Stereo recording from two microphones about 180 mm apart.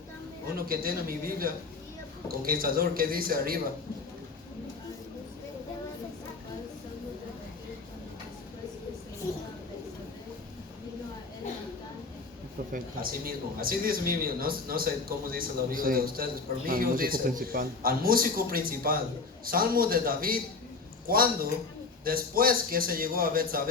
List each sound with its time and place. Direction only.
0.5 s a man's voice: 55° right (ahead or behind)
12.7 s a man's voice: 55° right (ahead or behind)